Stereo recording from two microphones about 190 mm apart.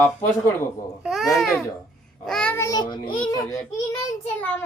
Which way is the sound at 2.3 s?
5° left (ahead or behind).